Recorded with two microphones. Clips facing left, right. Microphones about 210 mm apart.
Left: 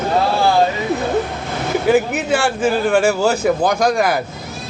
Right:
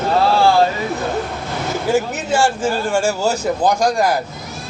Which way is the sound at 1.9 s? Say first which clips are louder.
Left 3 dB; 60° left (ahead or behind).